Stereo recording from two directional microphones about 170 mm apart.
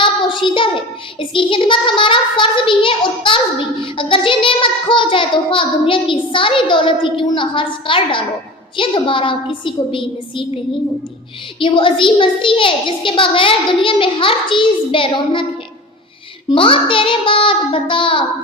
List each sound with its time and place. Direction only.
0.0 s child singing: 30° left (ahead or behind)
9.6 s a child's voice: 30° left (ahead or behind)
11.6 s a child's voice: 30° left (ahead or behind)
16.5 s a child's voice: 30° left (ahead or behind)